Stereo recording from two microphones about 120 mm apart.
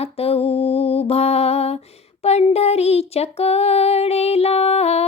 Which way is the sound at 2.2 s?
60° left (ahead or behind).